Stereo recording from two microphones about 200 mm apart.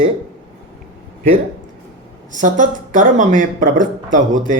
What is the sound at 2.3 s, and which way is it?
Speech, 40° right (ahead or behind).